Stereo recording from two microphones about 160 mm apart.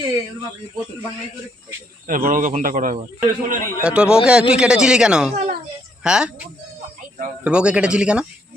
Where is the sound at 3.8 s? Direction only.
5° right (ahead or behind).